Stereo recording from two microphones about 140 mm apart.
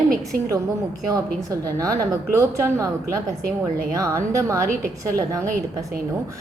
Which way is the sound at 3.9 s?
25° right (ahead or behind).